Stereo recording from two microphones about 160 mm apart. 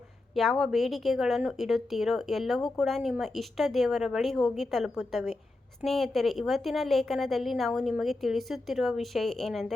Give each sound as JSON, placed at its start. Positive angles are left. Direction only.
{"t": 0.3, "sound": "a woman's voice", "side_deg": 0}